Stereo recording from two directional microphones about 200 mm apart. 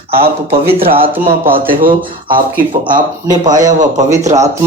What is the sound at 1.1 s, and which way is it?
Speech, 10° right (ahead or behind).